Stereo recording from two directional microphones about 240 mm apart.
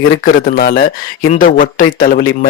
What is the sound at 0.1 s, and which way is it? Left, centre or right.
Speech, left.